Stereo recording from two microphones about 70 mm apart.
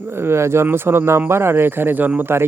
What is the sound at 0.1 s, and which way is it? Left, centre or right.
Speech, right.